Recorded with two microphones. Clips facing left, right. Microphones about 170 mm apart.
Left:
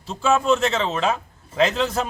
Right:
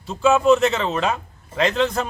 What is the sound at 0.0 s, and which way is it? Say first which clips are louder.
A man's voice: right 4 dB; centre (ahead or behind).